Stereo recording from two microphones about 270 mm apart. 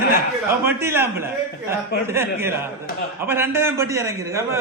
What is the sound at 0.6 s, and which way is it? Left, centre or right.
A man's voice, centre.